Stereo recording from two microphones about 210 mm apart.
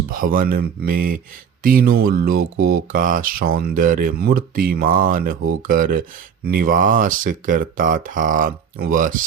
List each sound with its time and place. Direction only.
0.1 s speech: 40° right (ahead or behind)